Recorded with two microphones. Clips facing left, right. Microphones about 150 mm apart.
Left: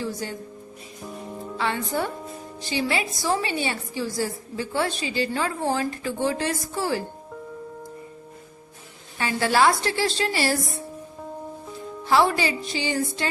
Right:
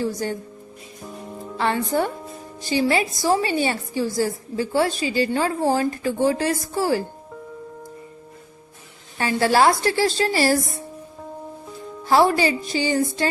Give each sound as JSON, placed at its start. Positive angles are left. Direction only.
{"t": 0.0, "sound": "speech", "side_deg": -45}
{"t": 1.0, "sound": "music", "side_deg": 0}
{"t": 1.5, "sound": "a woman's voice", "side_deg": -45}
{"t": 9.1, "sound": "a woman's voice", "side_deg": -35}
{"t": 12.0, "sound": "a woman's voice", "side_deg": -40}